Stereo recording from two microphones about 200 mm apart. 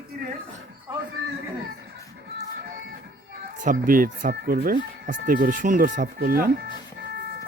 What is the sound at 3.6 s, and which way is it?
Speech, 45° right (ahead or behind).